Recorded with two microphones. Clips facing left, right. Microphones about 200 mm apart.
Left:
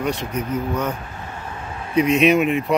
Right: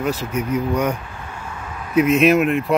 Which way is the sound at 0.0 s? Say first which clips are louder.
Right 1 dB; 5° right (ahead or behind).